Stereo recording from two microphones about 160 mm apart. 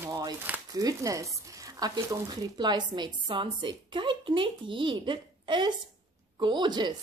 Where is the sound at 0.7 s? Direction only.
20° right (ahead or behind).